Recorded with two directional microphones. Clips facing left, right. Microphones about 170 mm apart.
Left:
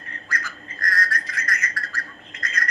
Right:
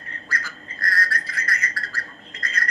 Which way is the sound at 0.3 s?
30° right (ahead or behind).